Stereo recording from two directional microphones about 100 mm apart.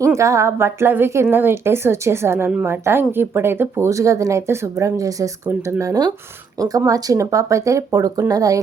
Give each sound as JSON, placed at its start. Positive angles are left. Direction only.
{"t": 0.2, "sound": "speech", "side_deg": -30}